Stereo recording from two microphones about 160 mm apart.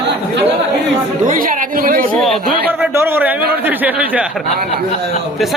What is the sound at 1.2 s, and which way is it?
Chatter, 55° right (ahead or behind).